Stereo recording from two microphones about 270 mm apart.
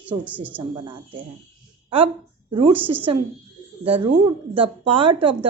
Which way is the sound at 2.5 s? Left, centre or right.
Right.